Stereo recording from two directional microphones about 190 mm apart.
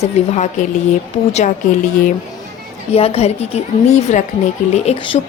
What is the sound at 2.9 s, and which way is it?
A woman's voice, 35° left (ahead or behind).